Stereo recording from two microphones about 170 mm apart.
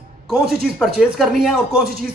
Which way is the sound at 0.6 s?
5° right (ahead or behind).